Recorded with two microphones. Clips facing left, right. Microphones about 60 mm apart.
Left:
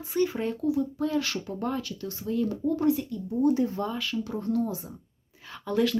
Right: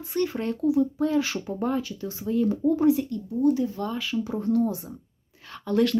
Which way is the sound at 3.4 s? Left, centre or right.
Left.